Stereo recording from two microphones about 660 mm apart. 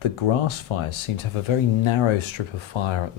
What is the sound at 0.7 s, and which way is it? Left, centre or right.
Speech, left.